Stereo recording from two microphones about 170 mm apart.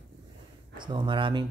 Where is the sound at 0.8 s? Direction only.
25° right (ahead or behind).